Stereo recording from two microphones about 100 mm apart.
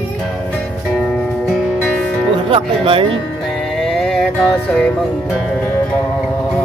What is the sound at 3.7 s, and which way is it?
Music, 5° left (ahead or behind).